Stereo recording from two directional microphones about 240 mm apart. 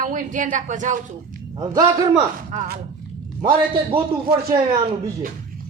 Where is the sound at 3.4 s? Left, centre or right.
Right.